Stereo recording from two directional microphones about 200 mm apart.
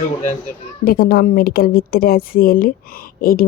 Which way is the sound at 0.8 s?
45° left (ahead or behind).